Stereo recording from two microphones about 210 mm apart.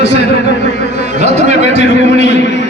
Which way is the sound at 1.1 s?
30° right (ahead or behind).